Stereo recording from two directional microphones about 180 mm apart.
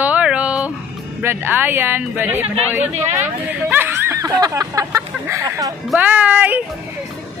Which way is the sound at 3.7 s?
15° right (ahead or behind).